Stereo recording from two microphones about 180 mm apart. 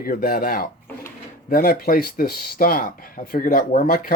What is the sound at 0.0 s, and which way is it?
Speech, 55° left (ahead or behind).